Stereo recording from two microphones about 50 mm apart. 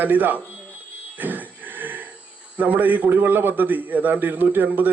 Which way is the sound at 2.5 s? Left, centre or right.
Right.